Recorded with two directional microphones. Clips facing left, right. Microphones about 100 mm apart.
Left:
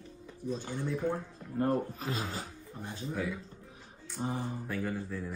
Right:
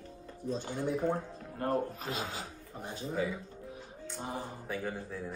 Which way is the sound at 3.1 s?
5° right (ahead or behind).